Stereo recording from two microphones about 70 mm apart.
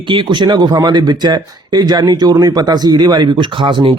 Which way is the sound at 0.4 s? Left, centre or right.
Right.